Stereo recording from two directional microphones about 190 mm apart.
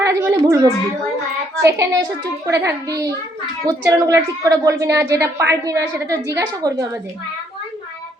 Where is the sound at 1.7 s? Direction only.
20° right (ahead or behind).